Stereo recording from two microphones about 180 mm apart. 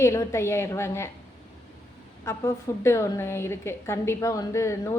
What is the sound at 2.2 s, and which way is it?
A woman's voice, 15° left (ahead or behind).